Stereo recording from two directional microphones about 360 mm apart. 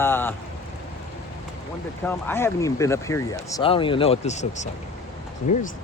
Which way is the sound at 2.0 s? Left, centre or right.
Centre.